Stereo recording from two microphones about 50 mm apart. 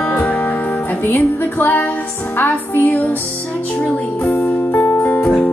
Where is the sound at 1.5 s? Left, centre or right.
Left.